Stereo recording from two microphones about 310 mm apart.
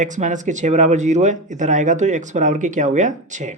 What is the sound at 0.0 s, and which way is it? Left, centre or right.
Speech, right.